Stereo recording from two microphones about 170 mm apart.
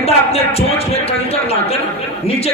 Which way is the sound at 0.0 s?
35° left (ahead or behind).